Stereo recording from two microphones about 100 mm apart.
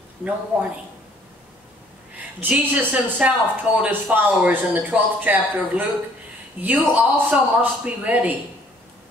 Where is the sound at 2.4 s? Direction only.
15° right (ahead or behind).